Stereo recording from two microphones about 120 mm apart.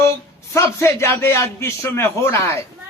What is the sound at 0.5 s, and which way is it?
A man's voice, 25° left (ahead or behind).